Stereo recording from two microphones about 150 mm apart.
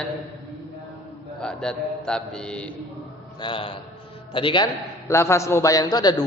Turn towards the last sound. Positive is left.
turn(degrees=25)  # may be behind; listen again after turning